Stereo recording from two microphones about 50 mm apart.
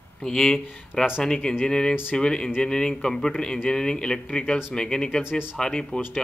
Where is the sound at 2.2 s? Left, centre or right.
Centre.